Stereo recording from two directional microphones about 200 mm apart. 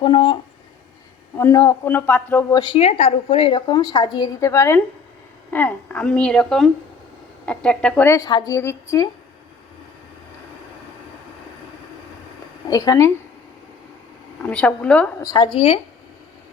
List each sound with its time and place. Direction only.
0.0 s a woman's voice: 25° left (ahead or behind)
1.4 s a woman's voice: 15° left (ahead or behind)
2.6 s a woman's voice: 25° left (ahead or behind)
12.6 s a woman's voice: 20° left (ahead or behind)
14.4 s speech: 5° left (ahead or behind)
15.2 s a woman's voice: 20° left (ahead or behind)